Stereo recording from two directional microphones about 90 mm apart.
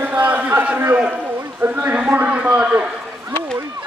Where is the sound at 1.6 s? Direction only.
20° right (ahead or behind).